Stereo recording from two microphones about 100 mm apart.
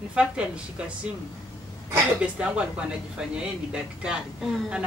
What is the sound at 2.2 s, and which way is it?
A woman's voice, 10° right (ahead or behind).